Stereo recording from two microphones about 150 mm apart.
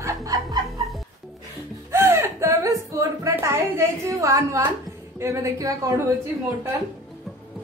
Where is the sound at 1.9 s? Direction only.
15° right (ahead or behind).